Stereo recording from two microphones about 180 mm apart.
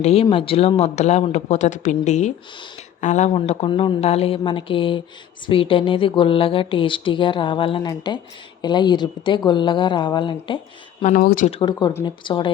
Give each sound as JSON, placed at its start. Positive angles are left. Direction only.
{"t": 0.0, "sound": "speech", "side_deg": 35}
{"t": 11.0, "sound": "speech", "side_deg": 50}
{"t": 11.6, "sound": "speech", "side_deg": 25}